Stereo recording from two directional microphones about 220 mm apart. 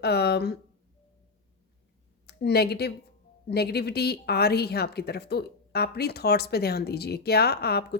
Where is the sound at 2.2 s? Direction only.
45° left (ahead or behind).